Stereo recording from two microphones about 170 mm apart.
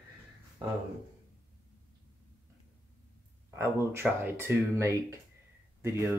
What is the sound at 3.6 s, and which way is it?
Speech, 15° right (ahead or behind).